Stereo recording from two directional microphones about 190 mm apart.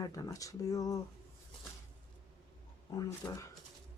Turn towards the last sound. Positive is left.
turn(degrees=20)  # may be behind; listen again after turning